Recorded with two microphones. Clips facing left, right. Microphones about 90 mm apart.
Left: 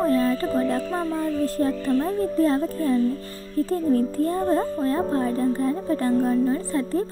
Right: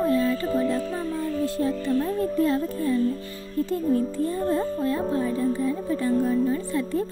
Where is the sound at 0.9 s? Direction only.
40° left (ahead or behind).